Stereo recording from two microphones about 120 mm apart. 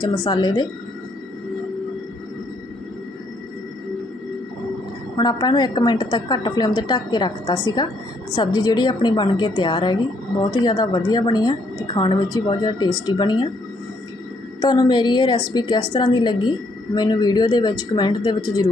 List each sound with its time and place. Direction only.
0.3 s a woman's voice: 40° left (ahead or behind)
5.1 s a woman's voice: 35° left (ahead or behind)
14.6 s a woman's voice: 35° left (ahead or behind)